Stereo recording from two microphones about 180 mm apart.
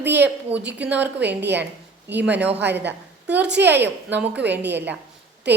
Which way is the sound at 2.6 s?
70° right (ahead or behind).